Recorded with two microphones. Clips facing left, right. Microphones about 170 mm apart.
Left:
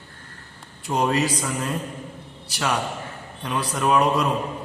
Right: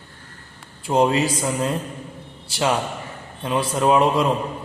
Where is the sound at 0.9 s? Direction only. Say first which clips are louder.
Right 4 dB; 25° right (ahead or behind).